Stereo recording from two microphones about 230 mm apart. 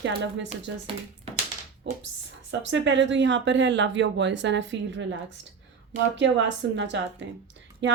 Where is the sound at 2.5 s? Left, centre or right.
Right.